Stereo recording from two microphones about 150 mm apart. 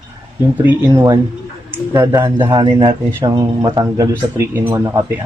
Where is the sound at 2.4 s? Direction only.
30° right (ahead or behind).